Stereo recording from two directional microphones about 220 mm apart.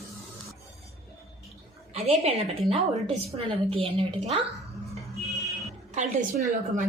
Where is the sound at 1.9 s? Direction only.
25° right (ahead or behind).